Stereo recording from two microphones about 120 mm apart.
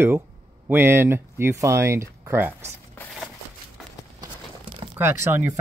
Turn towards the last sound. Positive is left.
turn(degrees=-20)  # may be behind; listen again after turning